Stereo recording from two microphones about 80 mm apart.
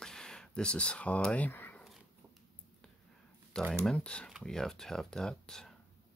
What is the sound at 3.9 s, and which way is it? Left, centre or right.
Speech, centre.